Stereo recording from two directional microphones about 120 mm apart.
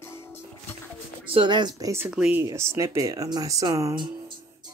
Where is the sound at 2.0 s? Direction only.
10° right (ahead or behind).